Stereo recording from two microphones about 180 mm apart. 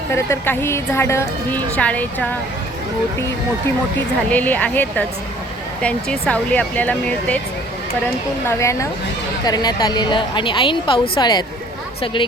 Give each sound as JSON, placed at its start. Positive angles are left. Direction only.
{"t": 0.1, "sound": "a woman's voice", "side_deg": 15}
{"t": 4.3, "sound": "a woman's voice", "side_deg": 10}
{"t": 8.4, "sound": "a woman's voice", "side_deg": 15}